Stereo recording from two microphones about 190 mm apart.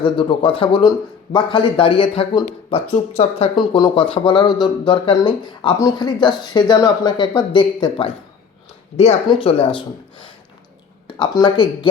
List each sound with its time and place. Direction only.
0.0 s speech: 25° left (ahead or behind)